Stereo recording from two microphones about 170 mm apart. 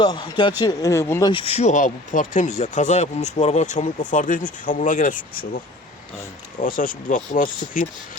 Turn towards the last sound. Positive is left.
turn(degrees=50)  # may be behind; listen again after turning